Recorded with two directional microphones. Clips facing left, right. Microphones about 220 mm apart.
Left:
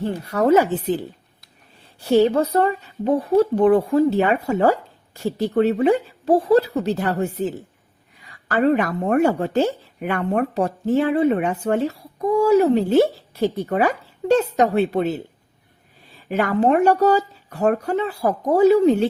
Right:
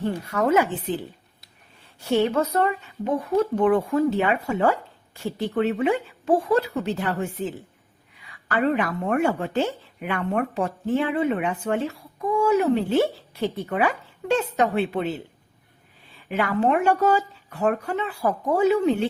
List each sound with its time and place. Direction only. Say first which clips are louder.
0.0 s a woman's voice: left 4 dB; 35° left (ahead or behind)
2.0 s a woman's voice: left 5 dB; 35° left (ahead or behind)
16.1 s a woman's voice: left 4 dB; 40° left (ahead or behind)